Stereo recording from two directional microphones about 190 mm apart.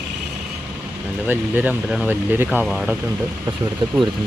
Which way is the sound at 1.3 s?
10° right (ahead or behind).